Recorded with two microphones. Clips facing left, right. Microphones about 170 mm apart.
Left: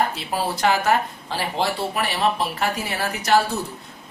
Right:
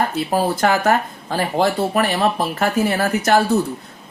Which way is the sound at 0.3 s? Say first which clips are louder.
Right 6 dB; 50° right (ahead or behind).